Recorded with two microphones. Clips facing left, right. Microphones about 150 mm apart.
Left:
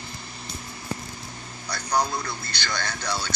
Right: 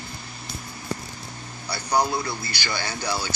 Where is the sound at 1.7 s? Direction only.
10° right (ahead or behind).